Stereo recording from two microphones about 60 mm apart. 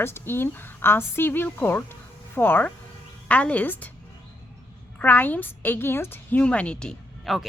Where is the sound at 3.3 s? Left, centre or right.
Left.